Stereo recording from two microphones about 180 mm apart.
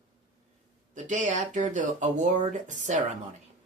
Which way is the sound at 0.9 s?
45° right (ahead or behind).